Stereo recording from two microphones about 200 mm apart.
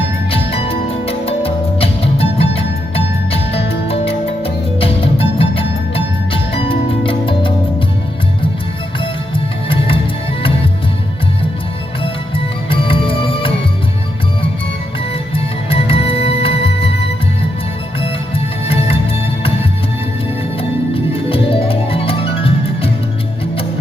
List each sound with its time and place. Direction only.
0.3 s music: 30° left (ahead or behind)
9.3 s music: 25° left (ahead or behind)
12.7 s music: 25° left (ahead or behind)
15.7 s music: 30° left (ahead or behind)
20.6 s music: 25° left (ahead or behind)